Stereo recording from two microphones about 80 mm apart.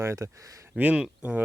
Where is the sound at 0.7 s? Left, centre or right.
Centre.